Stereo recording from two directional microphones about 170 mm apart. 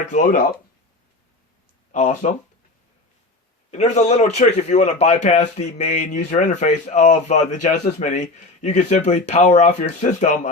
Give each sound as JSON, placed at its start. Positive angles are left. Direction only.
{"t": 0.0, "sound": "a man's voice", "side_deg": 45}
{"t": 1.9, "sound": "speech", "side_deg": 45}
{"t": 3.7, "sound": "a man's voice", "side_deg": 40}